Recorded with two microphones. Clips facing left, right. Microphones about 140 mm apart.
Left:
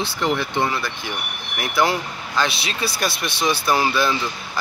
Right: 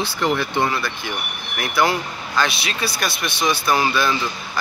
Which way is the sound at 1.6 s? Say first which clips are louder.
Right 1 dB; 25° left (ahead or behind).